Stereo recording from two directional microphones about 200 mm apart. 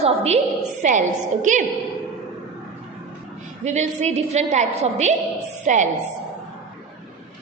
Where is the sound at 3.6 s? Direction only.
35° right (ahead or behind).